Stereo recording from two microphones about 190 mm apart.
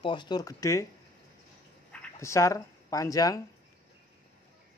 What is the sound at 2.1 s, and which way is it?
Speech, 15° left (ahead or behind).